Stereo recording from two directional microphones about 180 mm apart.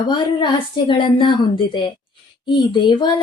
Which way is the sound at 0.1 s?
25° left (ahead or behind).